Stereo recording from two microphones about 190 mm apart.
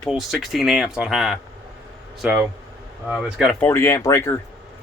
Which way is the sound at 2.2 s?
10° right (ahead or behind).